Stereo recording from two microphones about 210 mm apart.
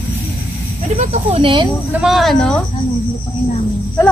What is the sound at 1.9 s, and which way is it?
Speech, 5° right (ahead or behind).